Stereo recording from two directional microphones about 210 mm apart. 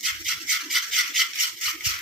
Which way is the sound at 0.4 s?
Centre (ahead or behind).